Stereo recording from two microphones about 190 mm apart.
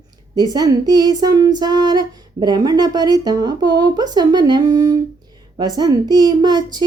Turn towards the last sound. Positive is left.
turn(degrees=-20)  # may be behind; listen again after turning